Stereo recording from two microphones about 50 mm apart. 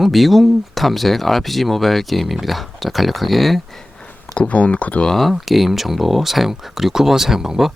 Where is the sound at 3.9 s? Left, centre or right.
Centre.